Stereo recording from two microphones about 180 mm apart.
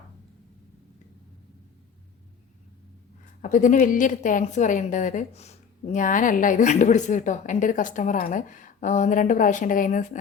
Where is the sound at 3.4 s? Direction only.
45° left (ahead or behind).